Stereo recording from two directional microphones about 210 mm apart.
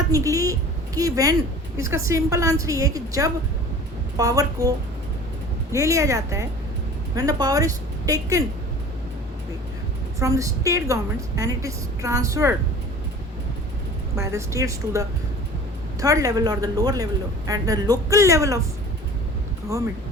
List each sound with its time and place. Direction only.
0.1 s speech: 15° right (ahead or behind)
5.7 s speech: 15° right (ahead or behind)
10.2 s speech: 15° right (ahead or behind)
14.2 s speech: 15° right (ahead or behind)